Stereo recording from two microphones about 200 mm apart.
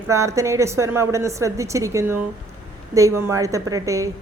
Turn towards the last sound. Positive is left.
turn(degrees=-15)  # may be behind; listen again after turning